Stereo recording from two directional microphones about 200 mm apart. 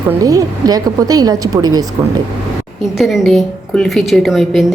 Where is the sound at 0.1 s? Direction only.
15° right (ahead or behind).